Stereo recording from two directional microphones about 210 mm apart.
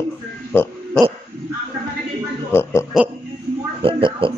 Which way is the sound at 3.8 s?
25° right (ahead or behind).